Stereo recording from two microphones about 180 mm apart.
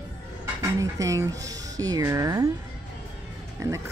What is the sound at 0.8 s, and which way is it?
Speech, 20° right (ahead or behind).